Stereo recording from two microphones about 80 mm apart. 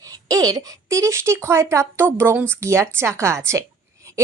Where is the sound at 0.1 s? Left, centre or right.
Right.